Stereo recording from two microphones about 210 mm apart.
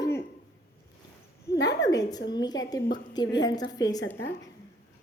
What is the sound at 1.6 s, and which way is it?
A woman's voice, 15° left (ahead or behind).